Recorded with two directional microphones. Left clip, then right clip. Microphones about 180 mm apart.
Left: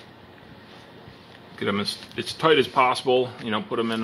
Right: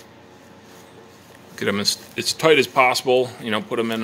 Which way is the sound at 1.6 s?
20° right (ahead or behind).